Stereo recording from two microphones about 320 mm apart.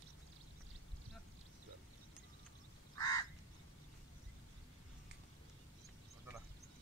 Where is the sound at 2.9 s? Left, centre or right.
Centre.